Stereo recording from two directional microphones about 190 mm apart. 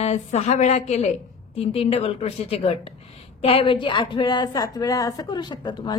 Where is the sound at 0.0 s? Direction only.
35° left (ahead or behind).